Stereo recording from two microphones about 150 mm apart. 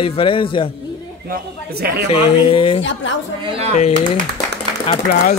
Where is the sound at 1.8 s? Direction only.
90° right.